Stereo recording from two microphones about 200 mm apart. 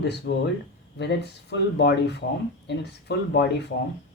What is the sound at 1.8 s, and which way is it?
Speech, 60° left (ahead or behind).